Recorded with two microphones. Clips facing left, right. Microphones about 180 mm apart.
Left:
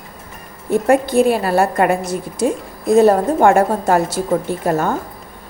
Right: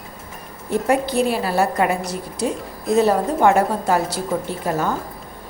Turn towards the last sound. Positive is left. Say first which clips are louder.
# left 4 dB
turn(degrees=50)  # may be behind; listen again after turning